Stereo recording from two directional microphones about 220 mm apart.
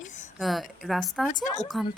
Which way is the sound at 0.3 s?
Centre (ahead or behind).